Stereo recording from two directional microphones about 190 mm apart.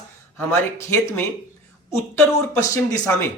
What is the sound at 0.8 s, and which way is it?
Speech, 15° left (ahead or behind).